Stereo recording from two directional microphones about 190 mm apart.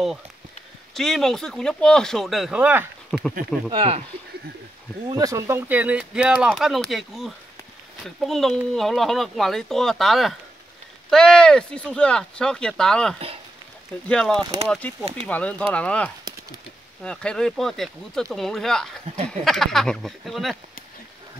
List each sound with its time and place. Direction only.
0.9 s speech: centre (ahead or behind)
3.1 s speech: 5° left (ahead or behind)
3.7 s speech: 30° right (ahead or behind)
5.0 s speech: 20° right (ahead or behind); by 20.5 s centre (ahead or behind)